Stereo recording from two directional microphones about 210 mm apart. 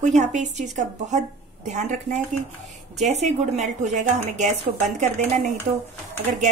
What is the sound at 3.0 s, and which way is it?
Speech, 35° right (ahead or behind).